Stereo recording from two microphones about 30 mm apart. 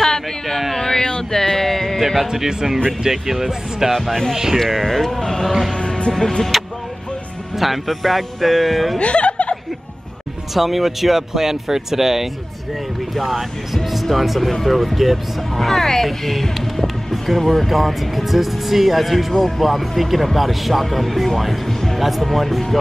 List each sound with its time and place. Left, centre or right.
0.0 s a sound: centre
2.0 s music: centre
2.3 s speech: centre
3.9 s speech: centre
4.8 s speech: centre
5.7 s music: left
6.5 s music: centre
7.5 s speech: centre
9.0 s chuckle: left
10.5 s speech: centre
15.6 s speech: centre